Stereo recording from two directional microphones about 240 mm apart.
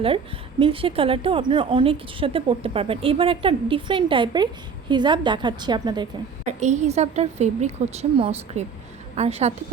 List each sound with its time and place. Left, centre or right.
0.6 s a woman's voice: right
6.4 s a woman's voice: right